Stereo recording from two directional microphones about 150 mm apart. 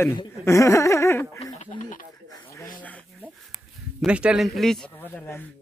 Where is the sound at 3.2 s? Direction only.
5° right (ahead or behind).